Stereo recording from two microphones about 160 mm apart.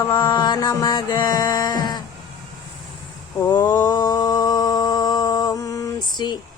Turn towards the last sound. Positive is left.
turn(degrees=25)  # may be behind; listen again after turning